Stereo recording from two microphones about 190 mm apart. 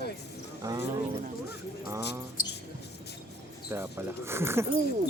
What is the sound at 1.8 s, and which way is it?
Speech, 15° right (ahead or behind).